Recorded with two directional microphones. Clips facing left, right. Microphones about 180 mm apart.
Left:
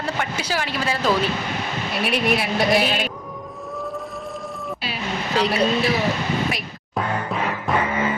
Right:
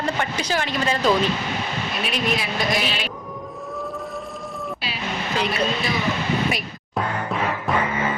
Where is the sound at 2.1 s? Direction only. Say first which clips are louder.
Left 4 dB; 65° left (ahead or behind).